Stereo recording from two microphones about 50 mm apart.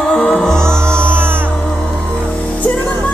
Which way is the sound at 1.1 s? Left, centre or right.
Right.